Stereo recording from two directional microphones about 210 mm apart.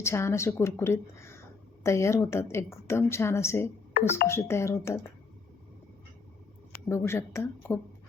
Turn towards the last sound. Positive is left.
turn(degrees=10)  # may be behind; listen again after turning